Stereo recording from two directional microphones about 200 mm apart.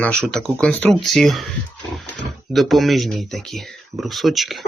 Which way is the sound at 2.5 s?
Centre (ahead or behind).